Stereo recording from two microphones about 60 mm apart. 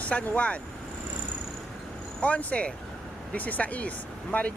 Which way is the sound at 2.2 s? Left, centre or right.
Left.